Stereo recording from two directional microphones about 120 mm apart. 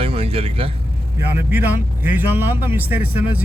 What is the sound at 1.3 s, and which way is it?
Speech, 15° right (ahead or behind).